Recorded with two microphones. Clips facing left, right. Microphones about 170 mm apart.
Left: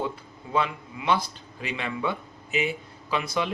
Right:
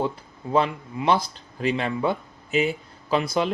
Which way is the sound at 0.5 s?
35° right (ahead or behind).